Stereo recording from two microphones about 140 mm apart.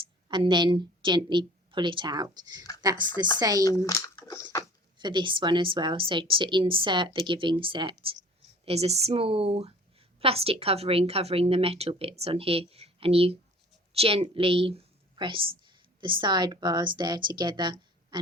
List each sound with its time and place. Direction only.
0.3 s a woman's voice: 35° right (ahead or behind)
3.8 s speech: 25° left (ahead or behind)
4.9 s a woman's voice: 35° right (ahead or behind)
8.6 s a woman's voice: 45° right (ahead or behind); by 18.2 s 30° right (ahead or behind)